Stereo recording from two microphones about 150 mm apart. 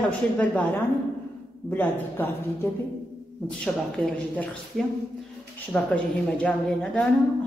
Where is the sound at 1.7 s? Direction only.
10° left (ahead or behind).